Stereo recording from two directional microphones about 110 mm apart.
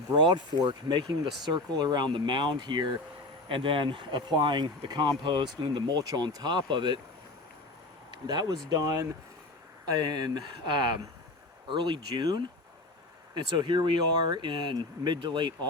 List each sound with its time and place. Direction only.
0.2 s speech: 45° right (ahead or behind)
8.3 s speech: 40° right (ahead or behind)
10.3 s speech: 45° right (ahead or behind)